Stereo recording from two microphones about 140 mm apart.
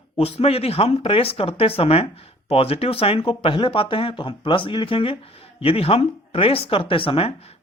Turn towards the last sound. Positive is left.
turn(degrees=40)  # may be behind; listen again after turning